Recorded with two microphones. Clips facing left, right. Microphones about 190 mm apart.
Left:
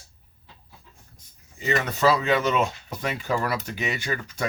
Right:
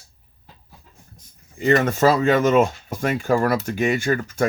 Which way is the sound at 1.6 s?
50° right (ahead or behind).